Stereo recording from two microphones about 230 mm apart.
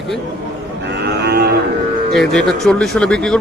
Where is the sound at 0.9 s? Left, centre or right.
Right.